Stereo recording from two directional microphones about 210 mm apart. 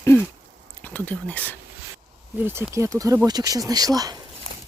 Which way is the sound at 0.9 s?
5° left (ahead or behind).